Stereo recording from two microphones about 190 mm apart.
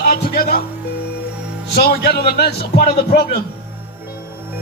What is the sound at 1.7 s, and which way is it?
A man's voice, 55° left (ahead or behind).